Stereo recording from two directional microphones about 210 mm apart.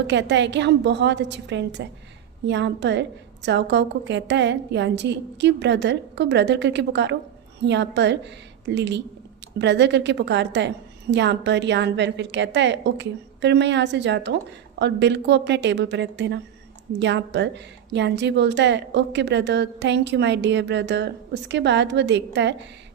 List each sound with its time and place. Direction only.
0.1 s a woman's voice: 55° right (ahead or behind)